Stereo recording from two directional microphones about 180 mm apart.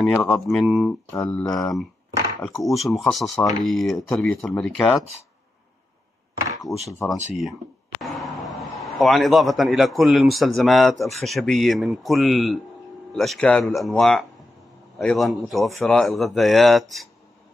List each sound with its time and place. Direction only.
0.1 s a man's voice: 5° left (ahead or behind)
1.1 s speech: 15° left (ahead or behind)
2.6 s a man's voice: centre (ahead or behind)
6.7 s speech: 15° left (ahead or behind)
8.0 s a man's voice: centre (ahead or behind)